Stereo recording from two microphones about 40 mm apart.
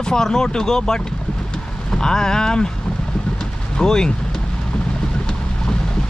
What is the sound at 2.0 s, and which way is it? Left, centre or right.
Speech, centre.